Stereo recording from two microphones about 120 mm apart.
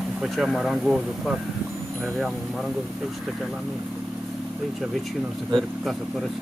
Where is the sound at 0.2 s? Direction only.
Centre (ahead or behind).